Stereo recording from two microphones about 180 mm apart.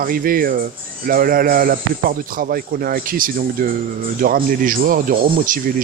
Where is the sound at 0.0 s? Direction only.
50° right (ahead or behind).